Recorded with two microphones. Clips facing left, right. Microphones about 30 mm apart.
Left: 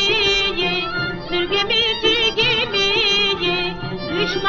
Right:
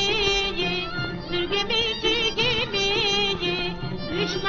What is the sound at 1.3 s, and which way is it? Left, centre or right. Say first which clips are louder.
Music: left 6 dB; left.